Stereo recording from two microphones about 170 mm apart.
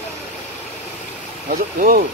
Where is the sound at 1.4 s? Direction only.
55° right (ahead or behind).